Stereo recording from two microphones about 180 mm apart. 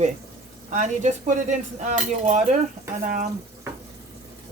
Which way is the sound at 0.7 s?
40° right (ahead or behind).